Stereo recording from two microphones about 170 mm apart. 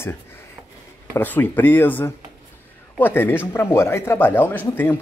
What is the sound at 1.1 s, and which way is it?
Speech, 10° left (ahead or behind).